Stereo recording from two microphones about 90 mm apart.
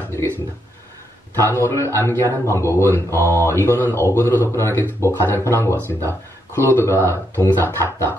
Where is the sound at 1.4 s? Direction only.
30° left (ahead or behind).